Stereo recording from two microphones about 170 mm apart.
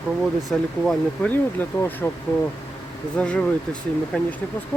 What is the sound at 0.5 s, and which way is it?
Speech, 5° left (ahead or behind).